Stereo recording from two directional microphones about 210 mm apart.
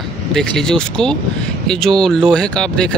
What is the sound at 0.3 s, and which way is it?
Speech, centre (ahead or behind).